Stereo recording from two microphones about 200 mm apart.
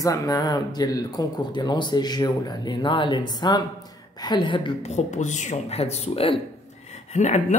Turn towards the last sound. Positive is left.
turn(degrees=35)  # may be behind; listen again after turning